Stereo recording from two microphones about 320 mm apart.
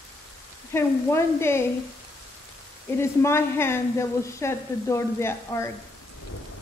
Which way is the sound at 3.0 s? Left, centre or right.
Centre.